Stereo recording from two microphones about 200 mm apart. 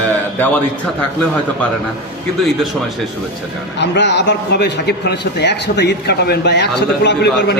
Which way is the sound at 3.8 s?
60° left (ahead or behind).